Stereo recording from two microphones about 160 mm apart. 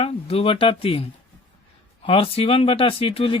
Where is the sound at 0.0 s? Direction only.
35° left (ahead or behind).